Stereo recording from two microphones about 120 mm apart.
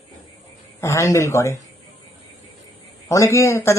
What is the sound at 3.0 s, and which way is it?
Speech, 25° left (ahead or behind).